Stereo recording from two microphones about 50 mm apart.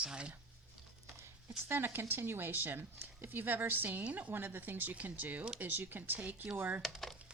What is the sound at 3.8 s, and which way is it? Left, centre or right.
Speech, right.